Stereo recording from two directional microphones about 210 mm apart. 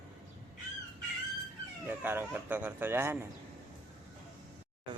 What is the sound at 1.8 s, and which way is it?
Speech, 10° right (ahead or behind).